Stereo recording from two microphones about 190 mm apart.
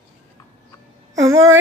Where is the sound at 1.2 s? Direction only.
90° right.